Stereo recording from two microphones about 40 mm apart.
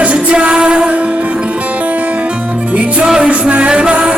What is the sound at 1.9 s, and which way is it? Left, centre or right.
Music, right.